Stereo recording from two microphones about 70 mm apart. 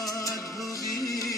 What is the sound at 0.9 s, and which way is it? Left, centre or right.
Music, left.